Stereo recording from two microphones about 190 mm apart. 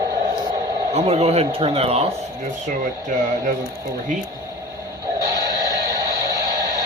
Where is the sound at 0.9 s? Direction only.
35° right (ahead or behind).